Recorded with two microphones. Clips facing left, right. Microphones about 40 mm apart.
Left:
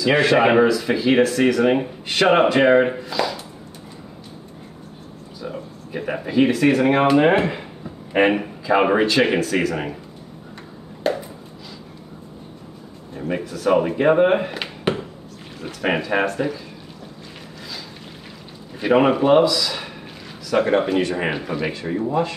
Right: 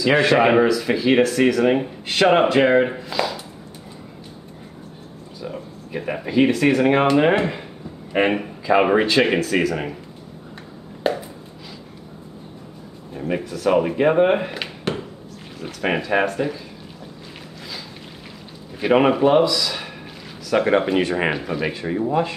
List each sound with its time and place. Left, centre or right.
0.0 s speech: centre
3.1 s speech: centre
5.4 s a sound: centre
6.0 s a man's voice: centre
8.9 s speech: centre
11.1 s a sound: centre
13.2 s speech: centre
18.8 s speech: centre
20.6 s speech: centre
21.0 s speech: right
21.3 s speech: centre
21.8 s speech: centre